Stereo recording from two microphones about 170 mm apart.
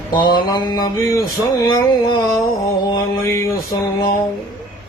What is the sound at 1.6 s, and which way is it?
Speech, 15° left (ahead or behind).